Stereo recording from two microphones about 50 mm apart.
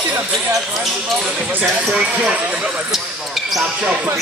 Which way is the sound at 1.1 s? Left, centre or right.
Right.